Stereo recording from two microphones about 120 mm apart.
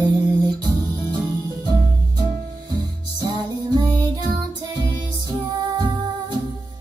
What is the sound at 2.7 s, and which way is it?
Music, 35° right (ahead or behind).